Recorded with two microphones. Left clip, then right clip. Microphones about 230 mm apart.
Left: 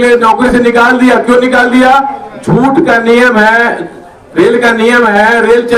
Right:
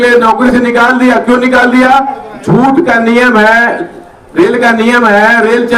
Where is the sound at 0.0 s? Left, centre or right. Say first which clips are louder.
Even; right.